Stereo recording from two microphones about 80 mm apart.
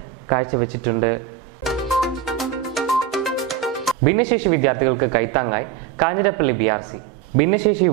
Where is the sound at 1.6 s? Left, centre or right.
Centre.